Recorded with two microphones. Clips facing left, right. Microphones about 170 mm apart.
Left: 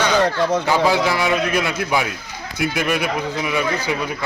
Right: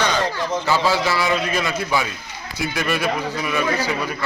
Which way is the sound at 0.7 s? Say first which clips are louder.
Right 1 dB; 15° left (ahead or behind).